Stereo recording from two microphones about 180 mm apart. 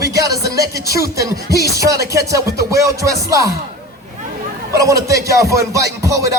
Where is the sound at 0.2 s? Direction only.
20° right (ahead or behind).